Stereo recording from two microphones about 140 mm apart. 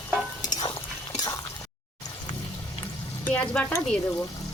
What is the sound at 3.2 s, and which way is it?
Speech, 10° left (ahead or behind).